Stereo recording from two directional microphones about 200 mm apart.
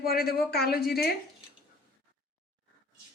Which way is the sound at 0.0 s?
50° left (ahead or behind).